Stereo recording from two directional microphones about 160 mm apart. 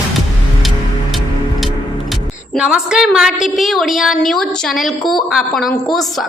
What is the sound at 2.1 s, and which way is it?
A woman's voice, 5° right (ahead or behind).